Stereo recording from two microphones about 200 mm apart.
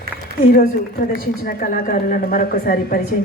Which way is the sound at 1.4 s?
50° left (ahead or behind).